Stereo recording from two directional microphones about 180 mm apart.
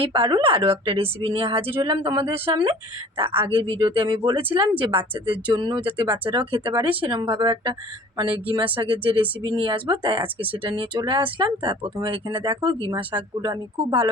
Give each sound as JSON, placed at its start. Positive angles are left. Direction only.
{"t": 0.0, "sound": "speech", "side_deg": -30}